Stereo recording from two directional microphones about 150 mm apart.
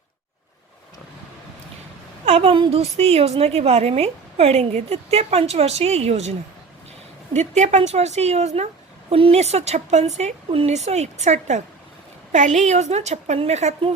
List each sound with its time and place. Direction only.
2.2 s a woman's voice: 45° right (ahead or behind)
7.3 s a woman's voice: 50° right (ahead or behind)